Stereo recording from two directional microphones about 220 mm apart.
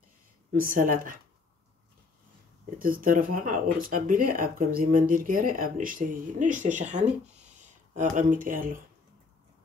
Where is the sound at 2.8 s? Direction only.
40° right (ahead or behind).